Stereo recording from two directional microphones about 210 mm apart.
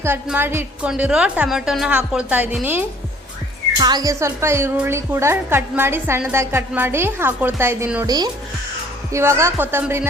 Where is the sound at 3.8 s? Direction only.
20° right (ahead or behind).